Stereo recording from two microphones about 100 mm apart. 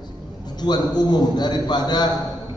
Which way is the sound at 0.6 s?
45° left (ahead or behind).